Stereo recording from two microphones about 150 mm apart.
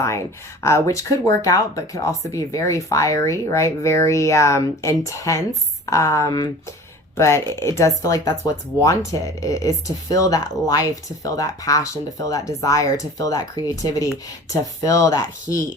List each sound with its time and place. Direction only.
0.6 s speech: 20° left (ahead or behind)